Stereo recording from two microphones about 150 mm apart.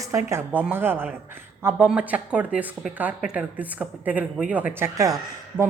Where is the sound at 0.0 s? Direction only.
20° right (ahead or behind).